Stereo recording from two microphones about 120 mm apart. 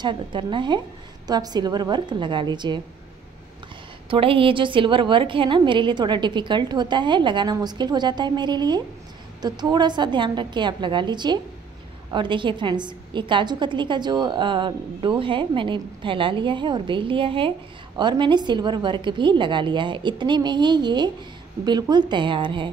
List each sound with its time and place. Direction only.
0.0 s a woman's voice: 40° right (ahead or behind)
4.1 s a woman's voice: 50° right (ahead or behind)